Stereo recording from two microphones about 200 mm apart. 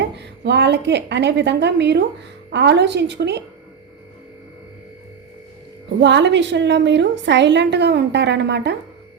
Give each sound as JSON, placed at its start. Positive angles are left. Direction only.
{"t": 0.0, "sound": "a woman's voice", "side_deg": -60}
{"t": 6.0, "sound": "a woman's voice", "side_deg": -60}